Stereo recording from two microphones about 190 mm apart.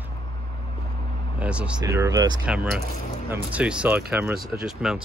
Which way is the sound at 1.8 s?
15° right (ahead or behind).